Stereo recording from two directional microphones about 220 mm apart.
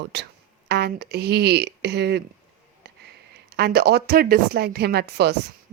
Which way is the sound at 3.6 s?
45° right (ahead or behind).